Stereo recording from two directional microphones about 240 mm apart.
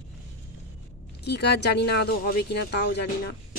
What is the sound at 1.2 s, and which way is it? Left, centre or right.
Speech, left.